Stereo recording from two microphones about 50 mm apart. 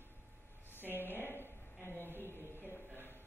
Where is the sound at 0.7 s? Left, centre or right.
Left.